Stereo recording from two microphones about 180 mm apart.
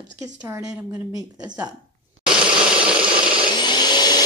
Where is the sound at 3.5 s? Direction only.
25° left (ahead or behind).